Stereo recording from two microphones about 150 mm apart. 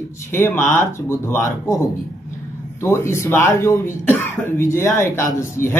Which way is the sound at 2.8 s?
15° left (ahead or behind).